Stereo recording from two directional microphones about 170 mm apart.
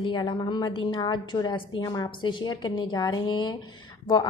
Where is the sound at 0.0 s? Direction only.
25° left (ahead or behind).